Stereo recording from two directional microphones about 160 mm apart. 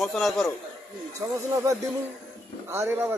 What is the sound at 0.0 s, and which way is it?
Speech, centre (ahead or behind).